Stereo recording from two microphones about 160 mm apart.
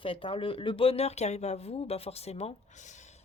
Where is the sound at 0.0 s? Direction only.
35° left (ahead or behind).